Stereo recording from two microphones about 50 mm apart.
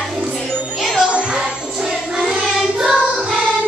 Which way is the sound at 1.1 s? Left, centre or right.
Centre.